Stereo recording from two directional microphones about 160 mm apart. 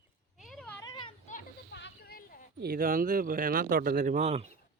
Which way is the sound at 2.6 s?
70° right (ahead or behind).